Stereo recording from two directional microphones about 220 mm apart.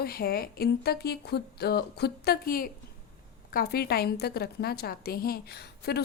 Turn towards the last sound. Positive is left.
turn(degrees=45)  # may be behind; listen again after turning